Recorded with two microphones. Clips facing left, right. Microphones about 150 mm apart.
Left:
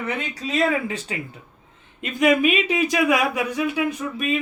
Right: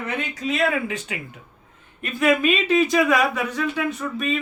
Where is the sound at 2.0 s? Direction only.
15° left (ahead or behind).